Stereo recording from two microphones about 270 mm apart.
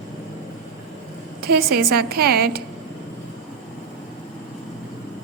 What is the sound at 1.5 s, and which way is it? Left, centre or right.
A woman's voice, right.